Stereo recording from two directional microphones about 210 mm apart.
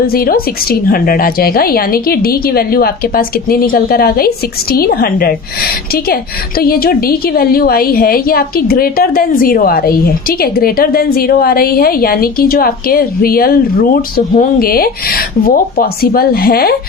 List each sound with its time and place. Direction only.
0.1 s a woman's voice: 45° left (ahead or behind)
6.6 s a woman's voice: 45° left (ahead or behind)